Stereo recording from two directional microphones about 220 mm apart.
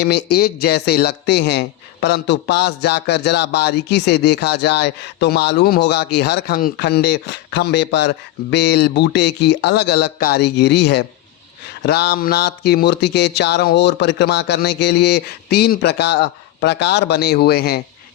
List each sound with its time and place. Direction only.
0.0 s speech: 50° left (ahead or behind)